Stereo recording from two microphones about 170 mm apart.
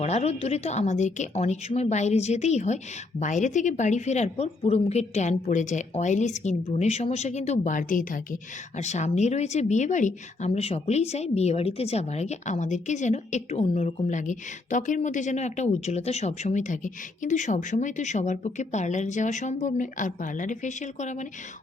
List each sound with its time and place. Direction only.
0.0 s a woman's voice: 40° left (ahead or behind)